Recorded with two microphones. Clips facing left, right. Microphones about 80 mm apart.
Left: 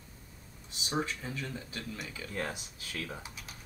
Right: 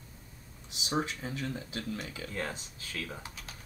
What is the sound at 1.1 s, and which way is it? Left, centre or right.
Speech, right.